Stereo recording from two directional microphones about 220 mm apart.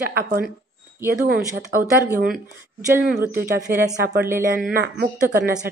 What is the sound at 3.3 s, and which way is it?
Speech, 45° right (ahead or behind).